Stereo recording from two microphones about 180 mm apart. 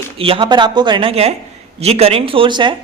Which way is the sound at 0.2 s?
30° right (ahead or behind).